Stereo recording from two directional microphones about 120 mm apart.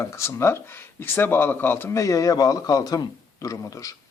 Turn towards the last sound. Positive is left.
turn(degrees=30)  # may be behind; listen again after turning